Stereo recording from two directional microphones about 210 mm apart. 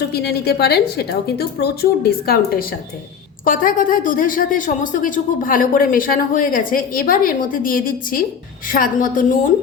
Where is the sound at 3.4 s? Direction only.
40° left (ahead or behind).